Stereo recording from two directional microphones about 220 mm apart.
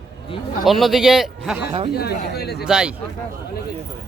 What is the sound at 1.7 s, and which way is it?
Speech, 25° right (ahead or behind).